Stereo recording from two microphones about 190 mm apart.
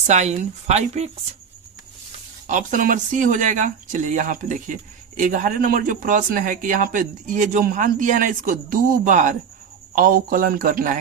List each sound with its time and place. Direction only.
0.1 s speech: 35° right (ahead or behind)
2.5 s speech: 45° right (ahead or behind)